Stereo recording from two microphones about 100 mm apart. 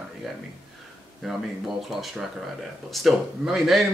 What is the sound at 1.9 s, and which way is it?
Speech, centre (ahead or behind).